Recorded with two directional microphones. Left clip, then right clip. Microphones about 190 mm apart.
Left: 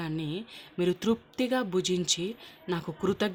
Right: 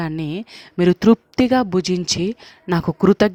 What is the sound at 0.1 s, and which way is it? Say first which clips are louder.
A woman's voice: right 8 dB; 55° right (ahead or behind).